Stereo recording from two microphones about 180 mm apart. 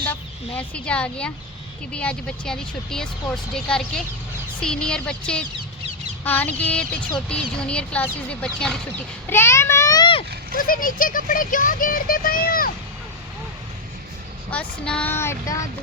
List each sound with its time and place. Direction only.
0.0 s speech: 10° left (ahead or behind); by 10.2 s 25° left (ahead or behind)
10.5 s speech: 50° left (ahead or behind)
14.5 s speech: 5° left (ahead or behind)